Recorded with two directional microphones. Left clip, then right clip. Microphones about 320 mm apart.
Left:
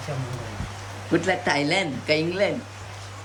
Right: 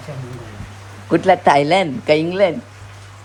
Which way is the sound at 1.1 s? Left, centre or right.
Centre.